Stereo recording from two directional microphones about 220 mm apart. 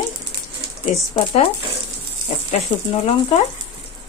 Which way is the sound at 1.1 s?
25° left (ahead or behind).